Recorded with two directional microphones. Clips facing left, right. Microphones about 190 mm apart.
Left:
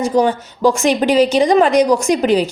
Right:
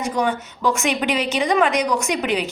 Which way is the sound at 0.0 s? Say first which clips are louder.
Left 7 dB; 30° left (ahead or behind).